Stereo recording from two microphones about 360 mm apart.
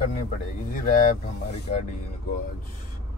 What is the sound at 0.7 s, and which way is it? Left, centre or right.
Speech, left.